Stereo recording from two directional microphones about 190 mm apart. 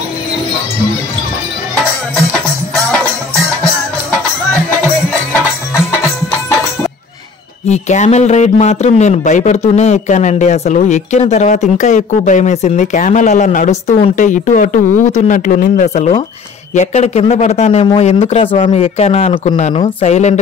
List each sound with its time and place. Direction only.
7.6 s speech: 35° left (ahead or behind)